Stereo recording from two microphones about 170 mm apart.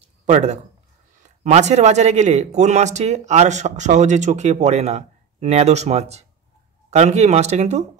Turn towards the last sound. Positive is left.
turn(degrees=-40)  # may be behind; listen again after turning